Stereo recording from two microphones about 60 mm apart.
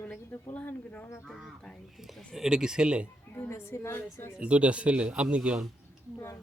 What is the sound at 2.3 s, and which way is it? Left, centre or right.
Speech, centre.